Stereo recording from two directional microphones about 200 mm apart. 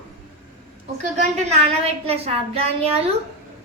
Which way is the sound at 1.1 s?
35° right (ahead or behind).